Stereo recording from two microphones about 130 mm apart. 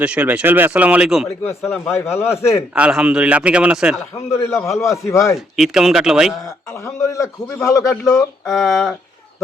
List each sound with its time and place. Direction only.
0.0 s speech: 10° right (ahead or behind)
1.8 s a man's voice: 20° left (ahead or behind)
2.7 s speech: 5° right (ahead or behind)
4.1 s a man's voice: 20° left (ahead or behind)
5.5 s speech: centre (ahead or behind)
6.7 s a man's voice: 20° left (ahead or behind)
8.4 s speech: centre (ahead or behind)